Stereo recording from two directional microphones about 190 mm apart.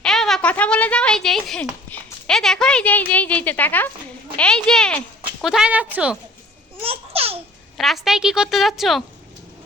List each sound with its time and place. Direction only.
0.0 s a sound: centre (ahead or behind)
1.9 s speech: 5° left (ahead or behind)
6.8 s babbling: 30° right (ahead or behind)
7.8 s a woman's voice: centre (ahead or behind)